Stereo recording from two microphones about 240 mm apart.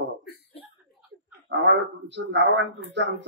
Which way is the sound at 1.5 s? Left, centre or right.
Right.